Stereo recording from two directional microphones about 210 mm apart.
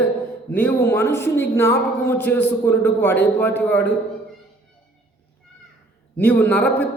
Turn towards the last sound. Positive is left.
turn(degrees=10)  # may be behind; listen again after turning